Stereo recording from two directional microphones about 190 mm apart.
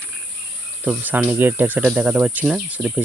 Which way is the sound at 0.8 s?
10° right (ahead or behind).